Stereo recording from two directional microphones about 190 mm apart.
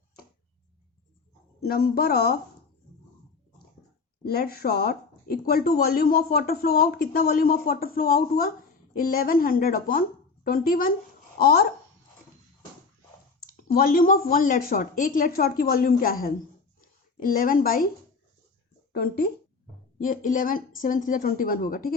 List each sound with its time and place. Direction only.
1.6 s speech: 55° left (ahead or behind)
4.2 s speech: 55° left (ahead or behind)
13.4 s speech: 50° left (ahead or behind)
18.9 s speech: 55° left (ahead or behind)
20.0 s speech: 45° left (ahead or behind)